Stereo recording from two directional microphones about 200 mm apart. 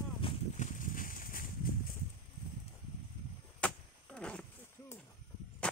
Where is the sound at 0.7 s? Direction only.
45° left (ahead or behind).